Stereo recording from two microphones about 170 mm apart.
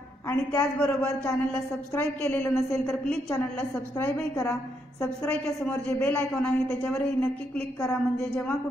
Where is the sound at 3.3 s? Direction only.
15° left (ahead or behind).